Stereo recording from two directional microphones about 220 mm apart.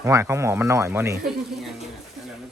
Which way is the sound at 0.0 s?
15° right (ahead or behind).